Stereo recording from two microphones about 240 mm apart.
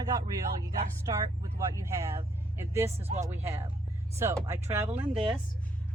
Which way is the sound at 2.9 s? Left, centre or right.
Right.